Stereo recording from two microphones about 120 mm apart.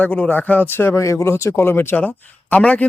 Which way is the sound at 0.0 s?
10° left (ahead or behind).